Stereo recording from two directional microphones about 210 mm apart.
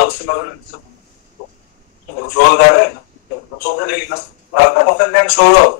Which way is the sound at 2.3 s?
50° left (ahead or behind).